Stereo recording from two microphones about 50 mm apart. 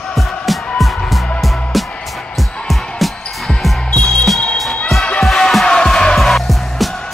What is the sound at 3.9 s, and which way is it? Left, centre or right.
Music, centre.